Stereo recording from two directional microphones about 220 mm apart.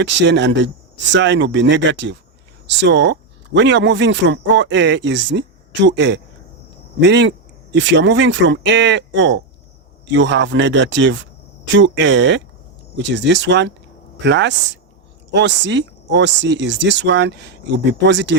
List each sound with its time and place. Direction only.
0.0 s speech: 55° right (ahead or behind)